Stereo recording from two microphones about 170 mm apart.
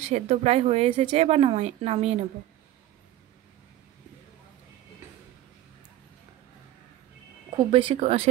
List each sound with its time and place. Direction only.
0.0 s a woman's voice: 40° right (ahead or behind)
7.5 s a woman's voice: 30° right (ahead or behind)